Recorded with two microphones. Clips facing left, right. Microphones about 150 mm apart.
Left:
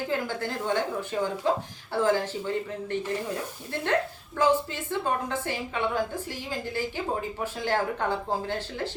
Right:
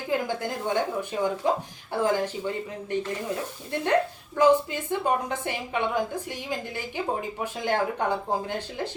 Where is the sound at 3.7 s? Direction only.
15° right (ahead or behind).